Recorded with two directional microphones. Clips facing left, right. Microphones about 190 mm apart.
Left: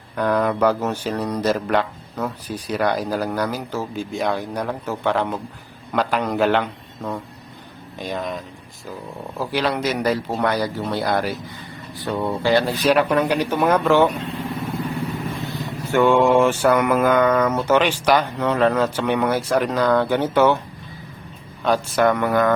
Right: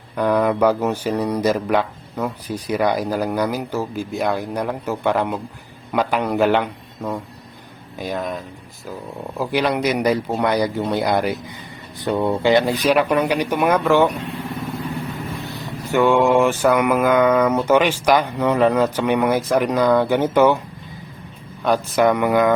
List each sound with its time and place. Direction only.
0.2 s mantra: 10° right (ahead or behind)
7.9 s speech: 5° right (ahead or behind)
9.4 s mantra: 15° right (ahead or behind)
15.9 s mantra: 10° right (ahead or behind)
21.6 s mantra: 10° right (ahead or behind)